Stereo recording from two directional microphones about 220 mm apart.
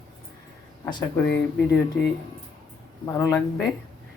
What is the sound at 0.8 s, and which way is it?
Speech, 10° left (ahead or behind).